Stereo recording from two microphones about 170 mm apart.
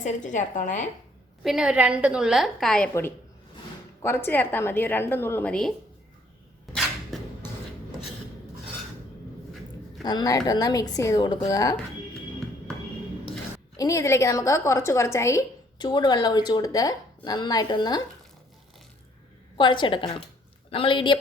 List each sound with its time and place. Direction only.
0.0 s a woman's voice: 45° left (ahead or behind)
1.5 s a woman's voice: 5° right (ahead or behind)
4.0 s a woman's voice: 15° left (ahead or behind)
6.7 s cupboard open or close: centre (ahead or behind)
10.0 s a woman's voice: 25° left (ahead or behind)
13.7 s a woman's voice: 20° left (ahead or behind)
19.5 s a woman's voice: 30° left (ahead or behind)